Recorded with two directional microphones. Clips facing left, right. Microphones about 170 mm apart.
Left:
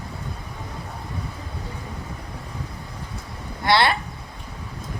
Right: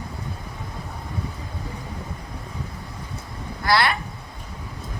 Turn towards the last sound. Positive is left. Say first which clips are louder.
# left 2 dB
turn(degrees=25)  # may be behind; listen again after turning